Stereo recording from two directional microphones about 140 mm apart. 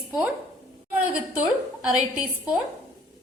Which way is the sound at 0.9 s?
5° right (ahead or behind).